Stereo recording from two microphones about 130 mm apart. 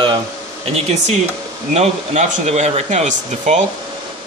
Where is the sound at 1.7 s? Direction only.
60° right (ahead or behind).